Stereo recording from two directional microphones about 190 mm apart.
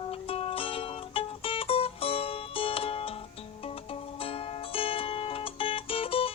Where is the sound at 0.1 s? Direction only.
30° left (ahead or behind).